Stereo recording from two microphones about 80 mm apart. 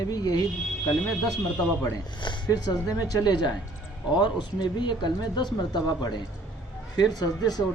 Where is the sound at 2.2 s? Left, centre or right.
Left.